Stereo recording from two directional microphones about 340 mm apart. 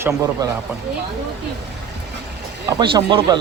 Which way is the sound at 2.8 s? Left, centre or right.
Centre.